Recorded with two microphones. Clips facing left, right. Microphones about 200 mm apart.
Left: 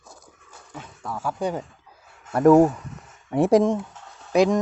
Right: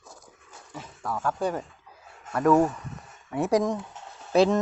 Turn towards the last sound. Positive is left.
turn(degrees=15)  # may be behind; listen again after turning